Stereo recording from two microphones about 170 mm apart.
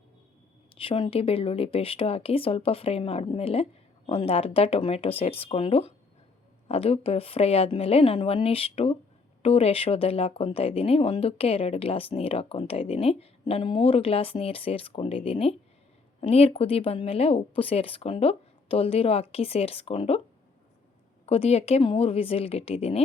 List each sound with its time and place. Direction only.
0.8 s speech: 30° left (ahead or behind)
21.2 s speech: 35° left (ahead or behind)